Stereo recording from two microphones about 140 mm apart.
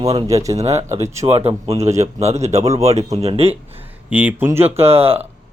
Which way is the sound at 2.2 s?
50° right (ahead or behind).